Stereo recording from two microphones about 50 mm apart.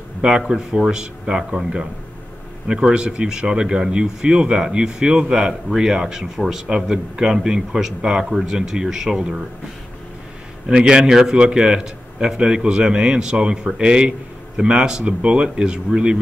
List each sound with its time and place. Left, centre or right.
0.2 s speech: centre
10.7 s speech: centre